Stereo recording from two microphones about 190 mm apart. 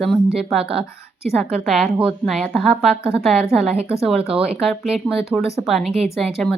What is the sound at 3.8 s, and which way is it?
Speech, 30° right (ahead or behind).